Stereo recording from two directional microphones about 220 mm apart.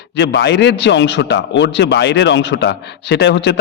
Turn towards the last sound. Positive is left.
turn(degrees=50)  # may be behind; listen again after turning